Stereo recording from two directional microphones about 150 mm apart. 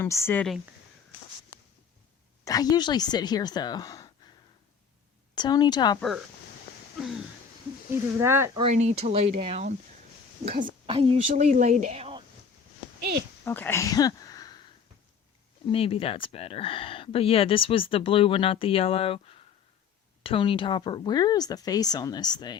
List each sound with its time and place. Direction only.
0.0 s speech: 15° left (ahead or behind)
2.4 s speech: 25° left (ahead or behind)
5.3 s speech: 30° left (ahead or behind)
6.0 s speech: centre (ahead or behind)
8.2 s speech: 15° right (ahead or behind)
8.6 s speech: 50° right (ahead or behind)
10.5 s a woman's voice: 65° right (ahead or behind)
10.8 s speech: 40° right (ahead or behind)
11.5 s speech: 55° right (ahead or behind)
13.0 s speech: 90° right
13.4 s speech: 15° left (ahead or behind)
15.7 s speech: 40° left (ahead or behind)